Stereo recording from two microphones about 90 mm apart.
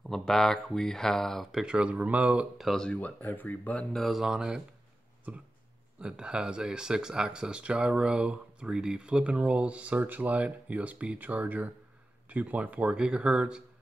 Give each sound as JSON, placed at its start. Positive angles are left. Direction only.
{"t": 0.1, "sound": "speech", "side_deg": 5}
{"t": 2.5, "sound": "speech", "side_deg": 0}
{"t": 2.9, "sound": "speech", "side_deg": 15}
{"t": 3.9, "sound": "speech", "side_deg": 0}
{"t": 5.9, "sound": "speech", "side_deg": -10}